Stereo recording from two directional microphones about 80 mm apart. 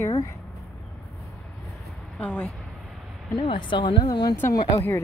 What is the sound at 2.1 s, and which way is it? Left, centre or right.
Speech, centre.